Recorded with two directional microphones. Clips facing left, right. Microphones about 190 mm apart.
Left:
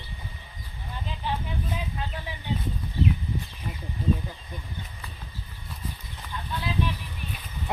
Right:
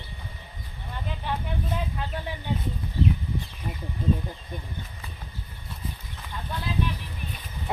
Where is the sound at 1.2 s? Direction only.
55° right (ahead or behind).